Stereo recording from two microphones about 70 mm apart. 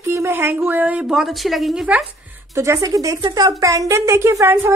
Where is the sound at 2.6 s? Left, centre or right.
Right.